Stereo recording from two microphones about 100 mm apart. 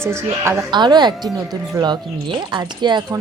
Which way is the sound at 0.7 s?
50° right (ahead or behind).